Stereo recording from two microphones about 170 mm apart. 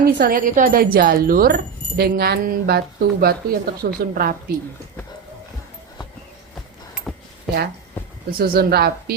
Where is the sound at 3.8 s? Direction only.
65° right (ahead or behind).